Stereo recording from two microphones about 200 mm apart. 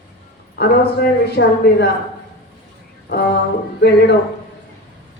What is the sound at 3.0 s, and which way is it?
Speech, 55° left (ahead or behind).